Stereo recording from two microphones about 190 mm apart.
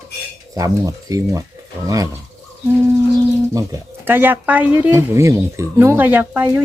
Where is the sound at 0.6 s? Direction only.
20° right (ahead or behind).